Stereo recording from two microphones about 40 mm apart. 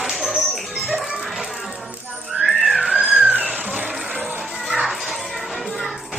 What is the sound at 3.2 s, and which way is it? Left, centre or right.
Music, right.